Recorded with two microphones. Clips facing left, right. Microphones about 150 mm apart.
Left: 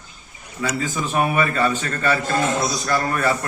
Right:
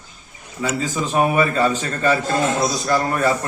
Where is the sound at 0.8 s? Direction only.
20° right (ahead or behind).